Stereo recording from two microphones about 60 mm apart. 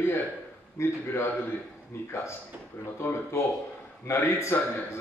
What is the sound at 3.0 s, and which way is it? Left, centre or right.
A man's voice, left.